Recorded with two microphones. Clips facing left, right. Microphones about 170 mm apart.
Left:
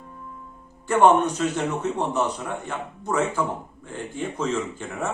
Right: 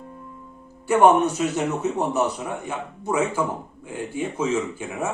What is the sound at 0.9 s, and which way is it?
Speech, 10° right (ahead or behind).